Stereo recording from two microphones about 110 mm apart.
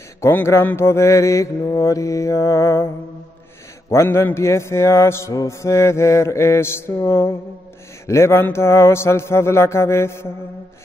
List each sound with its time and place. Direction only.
0.2 s mantra: 25° left (ahead or behind)
3.9 s mantra: 25° left (ahead or behind)